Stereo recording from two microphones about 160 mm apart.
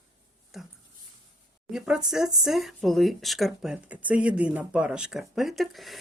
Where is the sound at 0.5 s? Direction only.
Centre (ahead or behind).